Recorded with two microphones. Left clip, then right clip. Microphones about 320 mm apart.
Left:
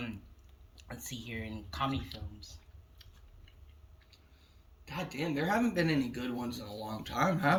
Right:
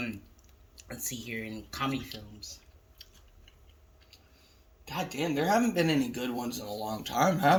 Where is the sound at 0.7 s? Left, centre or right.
Centre.